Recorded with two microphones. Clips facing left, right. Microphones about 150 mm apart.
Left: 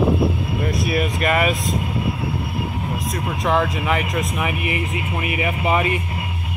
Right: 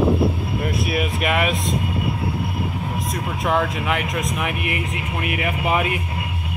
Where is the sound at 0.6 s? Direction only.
Centre (ahead or behind).